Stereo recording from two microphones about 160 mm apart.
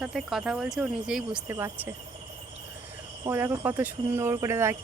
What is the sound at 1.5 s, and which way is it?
Speech, 15° right (ahead or behind).